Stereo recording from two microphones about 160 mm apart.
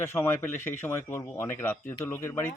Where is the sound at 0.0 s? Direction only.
15° left (ahead or behind).